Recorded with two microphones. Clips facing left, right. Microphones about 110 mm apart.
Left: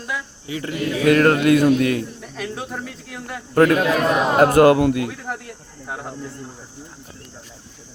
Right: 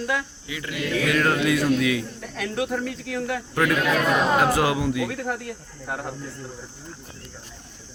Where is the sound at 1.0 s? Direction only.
50° left (ahead or behind).